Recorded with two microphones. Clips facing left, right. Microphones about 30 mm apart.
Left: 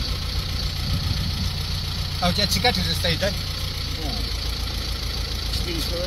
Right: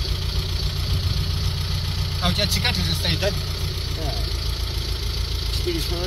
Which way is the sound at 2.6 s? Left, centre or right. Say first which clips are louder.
Left 2 dB; left.